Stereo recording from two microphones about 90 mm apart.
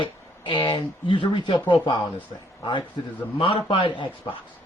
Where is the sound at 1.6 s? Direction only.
55° left (ahead or behind).